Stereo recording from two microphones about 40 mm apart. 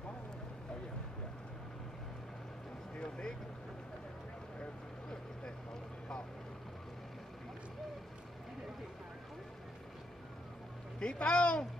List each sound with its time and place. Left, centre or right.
3.0 s vehicle: centre
11.0 s speech: left